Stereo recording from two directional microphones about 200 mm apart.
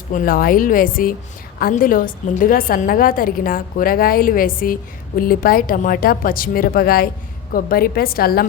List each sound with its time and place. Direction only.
0.1 s a woman's voice: 45° left (ahead or behind)